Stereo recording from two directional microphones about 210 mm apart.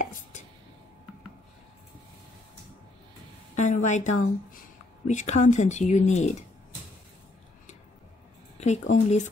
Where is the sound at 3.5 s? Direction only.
35° left (ahead or behind).